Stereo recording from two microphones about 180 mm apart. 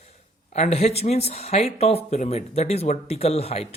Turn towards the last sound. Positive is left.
turn(degrees=35)  # may be behind; listen again after turning